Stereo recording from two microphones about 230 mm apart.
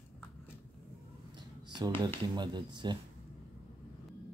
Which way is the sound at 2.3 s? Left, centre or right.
Centre.